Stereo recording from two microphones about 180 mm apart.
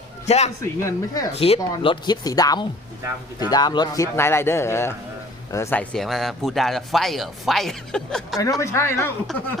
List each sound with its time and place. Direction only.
0.3 s a man's voice: 40° left (ahead or behind)
0.6 s speech: 15° left (ahead or behind)
1.3 s a man's voice: 35° left (ahead or behind); by 8.4 s 5° left (ahead or behind)
8.4 s speech: 20° left (ahead or behind)